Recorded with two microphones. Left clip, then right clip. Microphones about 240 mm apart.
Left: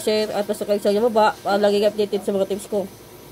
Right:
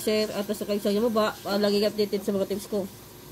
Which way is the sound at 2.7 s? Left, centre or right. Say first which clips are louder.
Left 6 dB; left.